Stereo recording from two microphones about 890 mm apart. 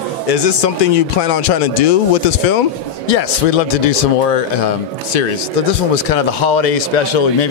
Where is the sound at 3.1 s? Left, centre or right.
Left.